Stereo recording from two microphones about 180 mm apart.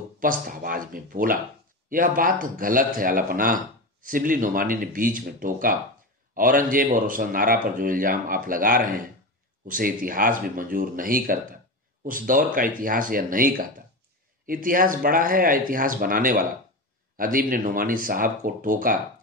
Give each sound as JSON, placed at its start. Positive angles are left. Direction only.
{"t": 0.2, "sound": "speech", "side_deg": -50}